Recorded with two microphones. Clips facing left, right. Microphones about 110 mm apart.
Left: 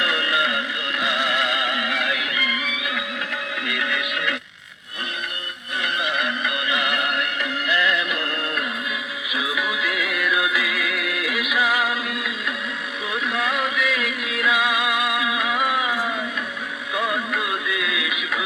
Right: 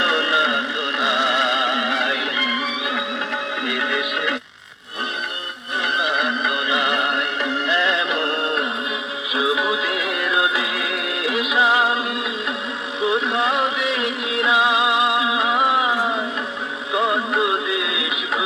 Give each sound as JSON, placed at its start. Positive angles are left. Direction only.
{"t": 0.0, "sound": "music", "side_deg": -25}
{"t": 6.0, "sound": "music", "side_deg": -20}